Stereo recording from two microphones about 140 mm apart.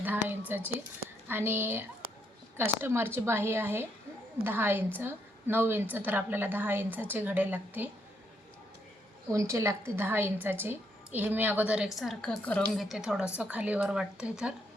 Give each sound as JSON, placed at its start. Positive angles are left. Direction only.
{"t": 0.0, "sound": "a sound", "side_deg": -15}
{"t": 1.3, "sound": "a woman's voice", "side_deg": -15}
{"t": 2.8, "sound": "a woman's voice", "side_deg": -15}
{"t": 9.3, "sound": "a woman's voice", "side_deg": -20}